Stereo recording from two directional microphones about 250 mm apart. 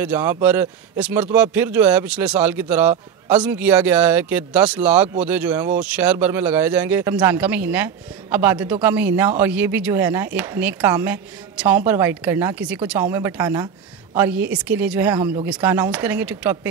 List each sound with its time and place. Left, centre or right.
0.0 s speech: centre